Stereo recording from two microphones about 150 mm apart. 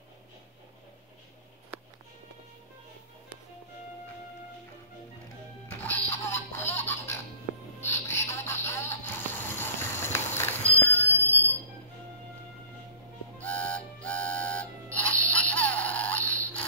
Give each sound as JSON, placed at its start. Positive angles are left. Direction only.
{"t": 5.7, "sound": "music", "side_deg": 15}
{"t": 6.8, "sound": "baby laughter", "side_deg": 15}
{"t": 7.8, "sound": "music", "side_deg": 15}
{"t": 13.4, "sound": "music", "side_deg": 10}